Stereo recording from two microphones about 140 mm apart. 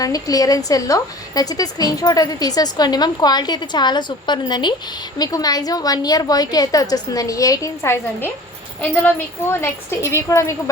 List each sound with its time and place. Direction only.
0.0 s a woman's voice: 25° left (ahead or behind)